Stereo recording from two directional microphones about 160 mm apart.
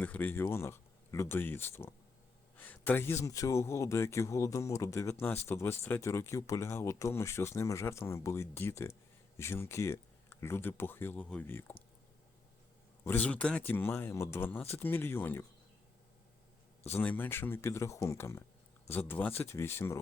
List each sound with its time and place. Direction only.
0.0 s speech: 10° left (ahead or behind)
13.1 s speech: 10° left (ahead or behind)
16.9 s speech: 10° left (ahead or behind)